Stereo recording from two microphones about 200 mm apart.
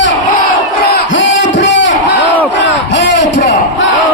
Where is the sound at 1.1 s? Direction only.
70° left (ahead or behind).